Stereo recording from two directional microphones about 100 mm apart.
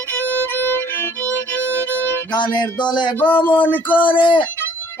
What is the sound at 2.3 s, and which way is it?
Music, 50° left (ahead or behind).